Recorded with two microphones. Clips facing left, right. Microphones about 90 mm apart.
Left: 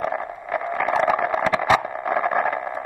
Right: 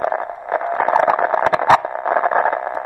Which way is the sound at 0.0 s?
40° right (ahead or behind).